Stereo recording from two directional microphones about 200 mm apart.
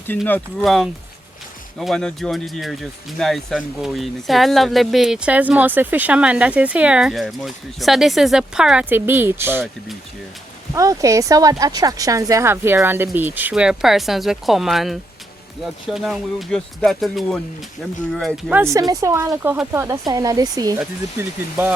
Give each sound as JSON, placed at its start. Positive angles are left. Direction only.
{"t": 0.3, "sound": "speech", "side_deg": 5}
{"t": 10.8, "sound": "speech", "side_deg": -15}
{"t": 18.5, "sound": "speech", "side_deg": -15}